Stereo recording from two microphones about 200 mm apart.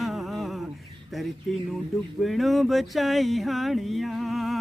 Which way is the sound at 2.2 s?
Centre (ahead or behind).